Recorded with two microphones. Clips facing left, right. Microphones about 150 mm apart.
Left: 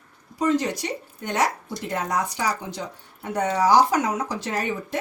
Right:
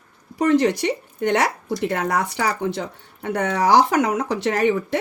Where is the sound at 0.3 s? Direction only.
65° right (ahead or behind).